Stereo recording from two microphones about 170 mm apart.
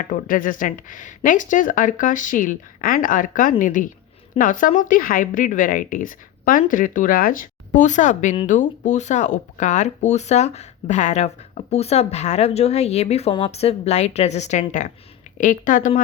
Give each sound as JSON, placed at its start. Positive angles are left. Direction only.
{"t": 0.0, "sound": "speech", "side_deg": 55}